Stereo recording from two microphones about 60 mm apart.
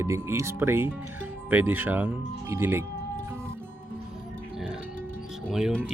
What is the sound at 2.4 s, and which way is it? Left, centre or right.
Speech, right.